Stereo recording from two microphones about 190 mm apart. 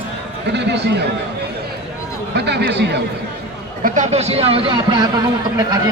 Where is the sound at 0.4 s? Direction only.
65° right (ahead or behind).